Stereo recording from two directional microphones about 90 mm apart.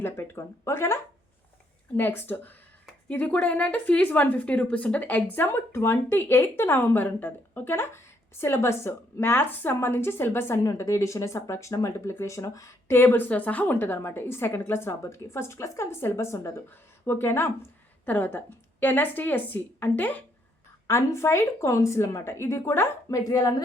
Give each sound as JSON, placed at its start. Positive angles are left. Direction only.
{"t": 0.0, "sound": "a woman's voice", "side_deg": 30}
{"t": 2.0, "sound": "a woman's voice", "side_deg": 20}
{"t": 20.8, "sound": "a woman's voice", "side_deg": 30}
{"t": 23.0, "sound": "speech", "side_deg": 40}